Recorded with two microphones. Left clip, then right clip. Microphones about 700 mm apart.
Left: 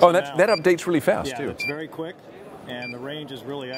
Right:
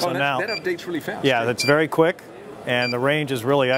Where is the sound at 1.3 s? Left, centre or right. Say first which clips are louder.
Right 10 dB; right.